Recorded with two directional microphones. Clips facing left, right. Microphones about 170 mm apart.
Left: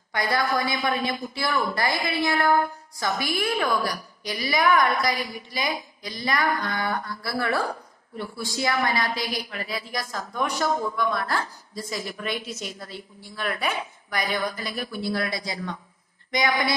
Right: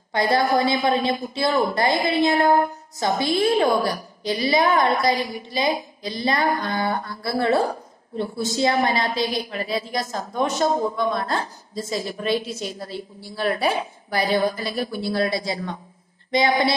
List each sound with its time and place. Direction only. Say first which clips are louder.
0.1 s a woman's voice: right 5 dB; 25° right (ahead or behind)